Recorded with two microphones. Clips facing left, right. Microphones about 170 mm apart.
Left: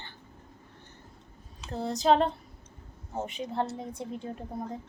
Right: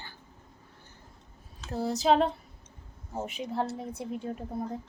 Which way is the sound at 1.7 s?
5° right (ahead or behind).